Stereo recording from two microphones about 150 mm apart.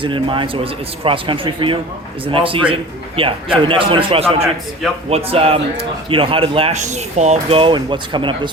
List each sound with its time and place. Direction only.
0.0 s speech: 35° right (ahead or behind); by 7.6 s 50° right (ahead or behind)
7.6 s speech: 30° right (ahead or behind)